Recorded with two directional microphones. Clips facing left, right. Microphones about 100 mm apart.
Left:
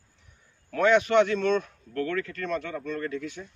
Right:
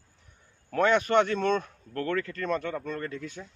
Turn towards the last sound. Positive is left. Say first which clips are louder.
# left 3 dB
turn(degrees=-35)  # may be behind; listen again after turning